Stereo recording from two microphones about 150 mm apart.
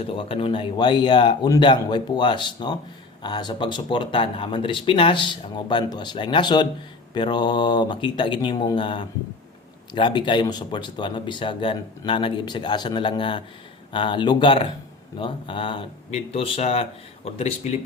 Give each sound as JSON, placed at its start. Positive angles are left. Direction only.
{"t": 0.0, "sound": "speech", "side_deg": 35}